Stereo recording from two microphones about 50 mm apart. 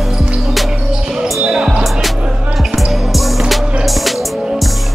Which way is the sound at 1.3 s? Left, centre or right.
Centre.